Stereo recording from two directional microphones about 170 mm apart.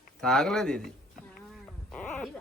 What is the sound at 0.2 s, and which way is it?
Speech, 5° left (ahead or behind).